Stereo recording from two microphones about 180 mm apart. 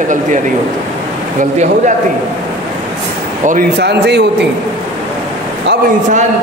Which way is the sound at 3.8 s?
65° right (ahead or behind).